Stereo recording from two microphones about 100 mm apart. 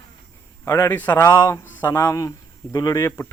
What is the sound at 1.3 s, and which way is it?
Speech, 35° left (ahead or behind).